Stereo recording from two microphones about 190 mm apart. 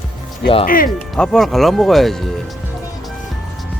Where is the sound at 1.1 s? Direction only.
Centre (ahead or behind).